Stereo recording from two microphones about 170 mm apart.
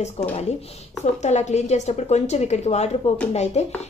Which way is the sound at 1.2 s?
40° left (ahead or behind).